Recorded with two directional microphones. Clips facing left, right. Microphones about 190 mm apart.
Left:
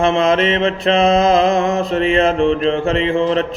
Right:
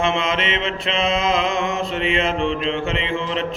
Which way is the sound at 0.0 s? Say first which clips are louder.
Left 7 dB; 40° left (ahead or behind).